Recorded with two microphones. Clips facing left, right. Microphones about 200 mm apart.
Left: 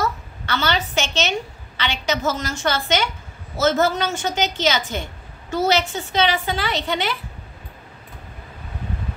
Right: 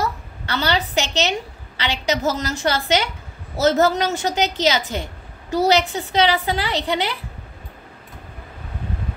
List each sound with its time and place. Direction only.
0.0 s a woman's voice: 35° right (ahead or behind)